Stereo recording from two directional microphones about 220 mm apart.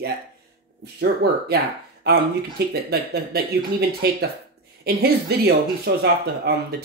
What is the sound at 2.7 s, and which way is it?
Speech, 45° right (ahead or behind).